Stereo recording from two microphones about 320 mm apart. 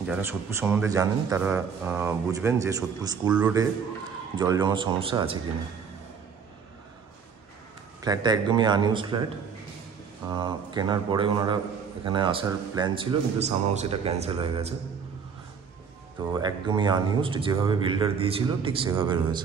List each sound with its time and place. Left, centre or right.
0.0 s a man's voice: centre
8.0 s a man's voice: centre
10.3 s a man's voice: centre
16.2 s a man's voice: centre